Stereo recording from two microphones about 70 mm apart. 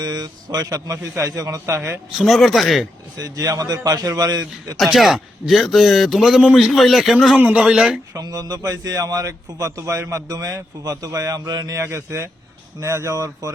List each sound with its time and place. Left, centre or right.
0.0 s a man's voice: right
2.1 s a man's voice: centre
3.2 s a man's voice: right
4.8 s a man's voice: centre
7.3 s speech: right
7.6 s speech: centre
8.2 s a man's voice: right
11.8 s speech: right